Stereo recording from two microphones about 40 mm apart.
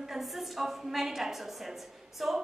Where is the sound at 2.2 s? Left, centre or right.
Centre.